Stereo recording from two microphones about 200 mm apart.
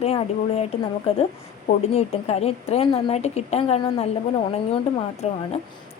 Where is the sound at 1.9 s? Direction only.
30° left (ahead or behind).